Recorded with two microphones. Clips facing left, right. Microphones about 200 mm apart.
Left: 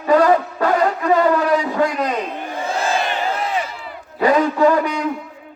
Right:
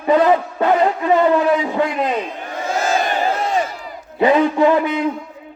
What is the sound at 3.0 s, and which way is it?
Crowd, 45° right (ahead or behind).